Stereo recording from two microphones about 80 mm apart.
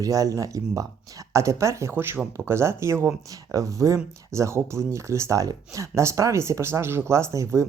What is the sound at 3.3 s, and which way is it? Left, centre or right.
Speech, right.